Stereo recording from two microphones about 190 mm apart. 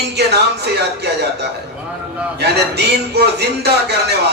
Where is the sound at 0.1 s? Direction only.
60° right (ahead or behind).